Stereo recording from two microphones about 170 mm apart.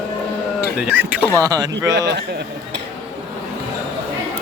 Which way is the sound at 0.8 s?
10° right (ahead or behind).